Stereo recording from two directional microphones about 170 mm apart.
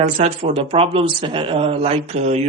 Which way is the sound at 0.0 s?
40° right (ahead or behind).